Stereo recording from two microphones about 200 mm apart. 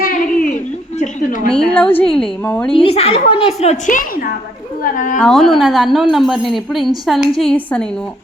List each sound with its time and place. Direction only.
0.0 s a sound: 40° left (ahead or behind)
1.5 s a woman's voice: 5° left (ahead or behind)
2.7 s a woman's voice: 30° left (ahead or behind)
5.2 s a woman's voice: centre (ahead or behind)